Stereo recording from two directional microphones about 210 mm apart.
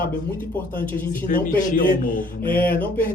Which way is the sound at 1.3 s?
40° left (ahead or behind).